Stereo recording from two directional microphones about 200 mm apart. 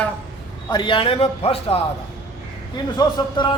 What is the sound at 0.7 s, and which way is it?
Speech, 25° left (ahead or behind).